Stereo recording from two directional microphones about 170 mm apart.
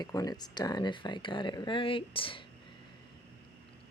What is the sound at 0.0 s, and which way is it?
Speech, 20° left (ahead or behind).